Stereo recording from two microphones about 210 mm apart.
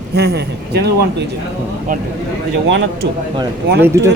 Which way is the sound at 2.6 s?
60° right (ahead or behind).